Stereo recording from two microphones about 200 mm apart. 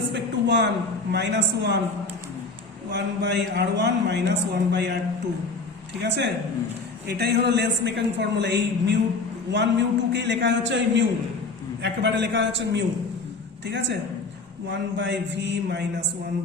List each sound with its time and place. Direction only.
0.1 s a sound: 60° right (ahead or behind)
1.1 s a man's voice: 60° right (ahead or behind)
2.9 s a man's voice: 60° right (ahead or behind)
6.0 s a man's voice: 60° right (ahead or behind)